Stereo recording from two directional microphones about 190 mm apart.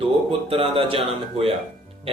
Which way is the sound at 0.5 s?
30° right (ahead or behind).